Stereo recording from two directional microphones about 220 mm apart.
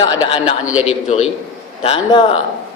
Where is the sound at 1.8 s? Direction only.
25° left (ahead or behind).